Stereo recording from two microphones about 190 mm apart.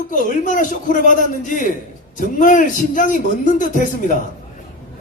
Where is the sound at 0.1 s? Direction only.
45° left (ahead or behind).